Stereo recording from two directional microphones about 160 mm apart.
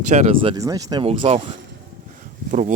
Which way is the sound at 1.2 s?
40° right (ahead or behind).